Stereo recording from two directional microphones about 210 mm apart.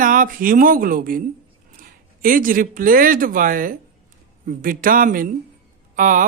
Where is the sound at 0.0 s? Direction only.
40° right (ahead or behind).